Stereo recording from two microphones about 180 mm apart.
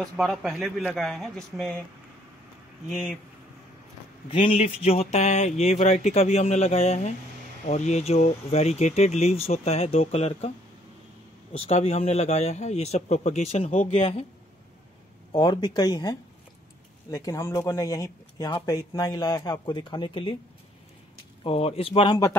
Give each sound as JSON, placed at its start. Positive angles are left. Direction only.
{"t": 0.0, "sound": "a man's voice", "side_deg": 0}
{"t": 4.3, "sound": "speech", "side_deg": 30}
{"t": 11.5, "sound": "speech", "side_deg": 35}
{"t": 15.3, "sound": "speech", "side_deg": 25}
{"t": 21.5, "sound": "speech", "side_deg": 30}